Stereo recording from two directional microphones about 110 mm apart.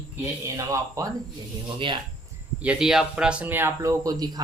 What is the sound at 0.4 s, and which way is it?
Speech, 30° right (ahead or behind).